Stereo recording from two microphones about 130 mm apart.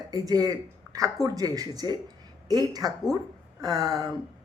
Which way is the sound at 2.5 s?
30° right (ahead or behind).